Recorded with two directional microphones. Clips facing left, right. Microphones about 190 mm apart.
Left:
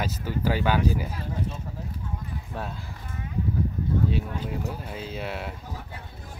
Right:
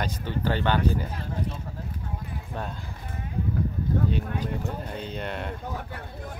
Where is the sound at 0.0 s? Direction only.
5° left (ahead or behind).